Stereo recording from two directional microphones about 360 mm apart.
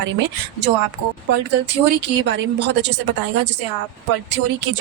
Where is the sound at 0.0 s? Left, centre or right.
Right.